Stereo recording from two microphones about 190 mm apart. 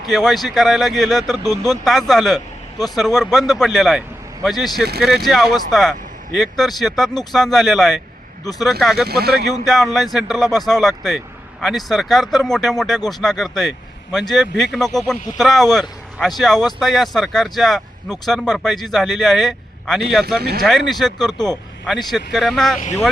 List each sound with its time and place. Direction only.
0.0 s speech: centre (ahead or behind)
9.0 s speech: 55° right (ahead or behind)
9.6 s speech: centre (ahead or behind)
20.4 s speech: 55° right (ahead or behind)
20.7 s speech: centre (ahead or behind)